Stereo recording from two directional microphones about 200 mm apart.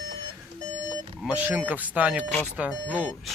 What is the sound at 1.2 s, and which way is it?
Speech, 5° right (ahead or behind).